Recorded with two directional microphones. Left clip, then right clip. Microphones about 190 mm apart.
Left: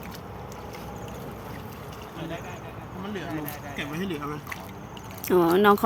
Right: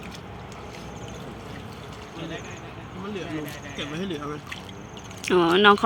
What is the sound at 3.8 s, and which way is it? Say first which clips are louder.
Speech: right 1 dB; 15° left (ahead or behind).